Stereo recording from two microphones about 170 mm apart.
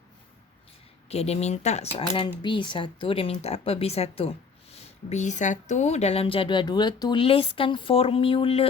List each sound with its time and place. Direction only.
1.0 s speech: 40° left (ahead or behind)
2.0 s speech: 30° left (ahead or behind)